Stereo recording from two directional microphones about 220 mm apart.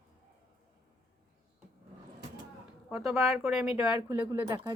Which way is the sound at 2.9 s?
5° right (ahead or behind).